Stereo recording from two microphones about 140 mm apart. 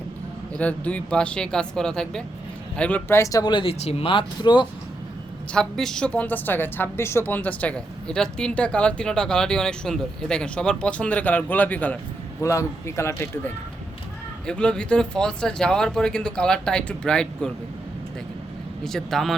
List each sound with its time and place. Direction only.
0.5 s a woman's voice: 10° left (ahead or behind); by 4.6 s 35° left (ahead or behind)
5.5 s a woman's voice: 5° left (ahead or behind)
12.4 s a man's voice: 20° left (ahead or behind)
14.4 s speech: 5° left (ahead or behind)
18.9 s speech: centre (ahead or behind)